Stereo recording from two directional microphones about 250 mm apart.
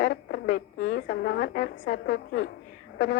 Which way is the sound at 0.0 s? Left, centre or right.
Left.